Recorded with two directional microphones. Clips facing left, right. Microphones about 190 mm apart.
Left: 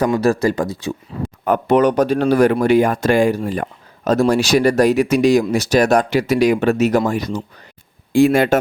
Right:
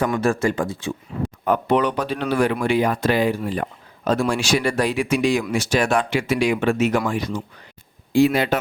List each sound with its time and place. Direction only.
0.0 s speech: 35° left (ahead or behind)